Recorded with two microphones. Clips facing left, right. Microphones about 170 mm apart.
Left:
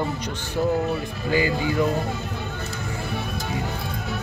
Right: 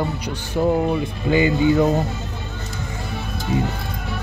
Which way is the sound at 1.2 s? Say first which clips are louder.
Right 6 dB; 20° right (ahead or behind).